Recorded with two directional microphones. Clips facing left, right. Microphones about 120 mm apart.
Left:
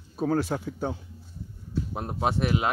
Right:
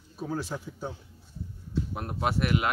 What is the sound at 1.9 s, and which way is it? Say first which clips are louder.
Speech: left 3 dB; 25° left (ahead or behind).